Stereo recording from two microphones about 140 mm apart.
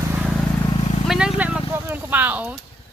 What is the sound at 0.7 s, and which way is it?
Vehicle, 45° left (ahead or behind).